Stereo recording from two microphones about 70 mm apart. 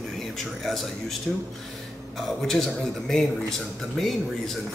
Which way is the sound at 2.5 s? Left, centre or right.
Centre.